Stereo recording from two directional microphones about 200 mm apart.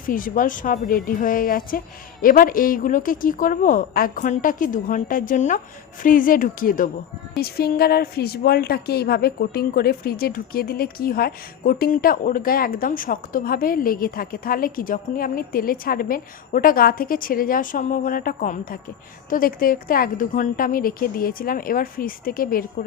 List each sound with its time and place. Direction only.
0.0 s a woman's voice: 45° left (ahead or behind)